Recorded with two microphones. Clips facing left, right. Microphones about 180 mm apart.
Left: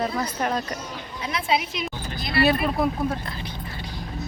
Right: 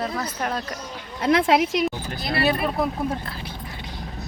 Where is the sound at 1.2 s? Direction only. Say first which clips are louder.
Right 7 dB; 75° right (ahead or behind).